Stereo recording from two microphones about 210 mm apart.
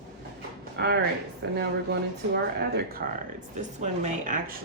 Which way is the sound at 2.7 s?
45° right (ahead or behind).